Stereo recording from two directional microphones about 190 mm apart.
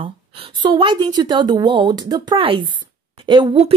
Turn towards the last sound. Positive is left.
turn(degrees=-30)  # may be behind; listen again after turning